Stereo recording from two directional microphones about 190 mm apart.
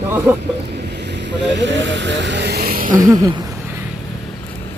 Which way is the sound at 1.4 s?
65° right (ahead or behind).